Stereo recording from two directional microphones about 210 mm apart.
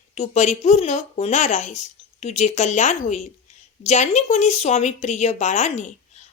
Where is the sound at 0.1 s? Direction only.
35° left (ahead or behind).